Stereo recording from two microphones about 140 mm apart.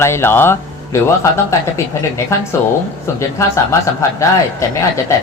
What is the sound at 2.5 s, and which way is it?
Speech, 20° left (ahead or behind).